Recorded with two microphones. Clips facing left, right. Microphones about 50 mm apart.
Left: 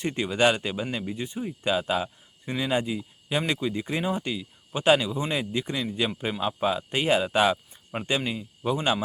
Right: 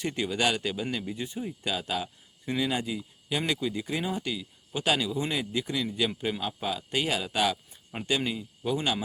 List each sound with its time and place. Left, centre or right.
0.0 s speech: centre